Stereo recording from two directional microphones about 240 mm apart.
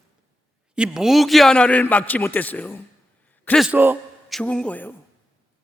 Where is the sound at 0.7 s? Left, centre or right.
Centre.